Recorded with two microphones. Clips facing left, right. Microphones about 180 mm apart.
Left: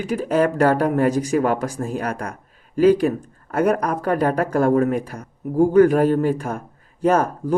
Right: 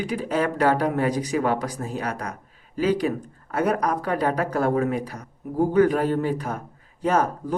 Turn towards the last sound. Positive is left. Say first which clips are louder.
# left 4 dB
turn(degrees=45)  # may be behind; listen again after turning